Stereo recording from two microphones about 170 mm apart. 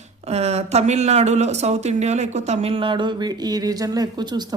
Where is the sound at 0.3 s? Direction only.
40° right (ahead or behind).